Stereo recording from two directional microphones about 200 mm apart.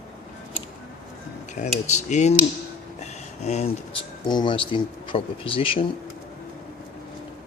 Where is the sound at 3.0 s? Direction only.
35° left (ahead or behind).